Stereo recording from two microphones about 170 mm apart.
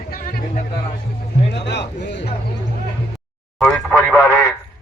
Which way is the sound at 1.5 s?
80° left.